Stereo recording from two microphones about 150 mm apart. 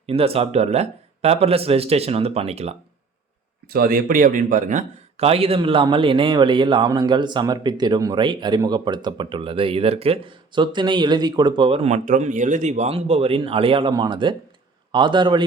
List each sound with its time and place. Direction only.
0.0 s speech: 40° right (ahead or behind)
3.7 s a man's voice: 75° right (ahead or behind); by 11.9 s 40° right (ahead or behind)
12.0 s a man's voice: 60° right (ahead or behind); by 15.4 s 30° right (ahead or behind)